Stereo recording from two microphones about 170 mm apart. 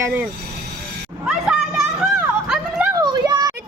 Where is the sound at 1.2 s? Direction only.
5° right (ahead or behind).